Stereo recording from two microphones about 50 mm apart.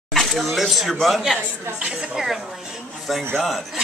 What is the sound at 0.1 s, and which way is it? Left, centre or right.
A woman's voice, centre.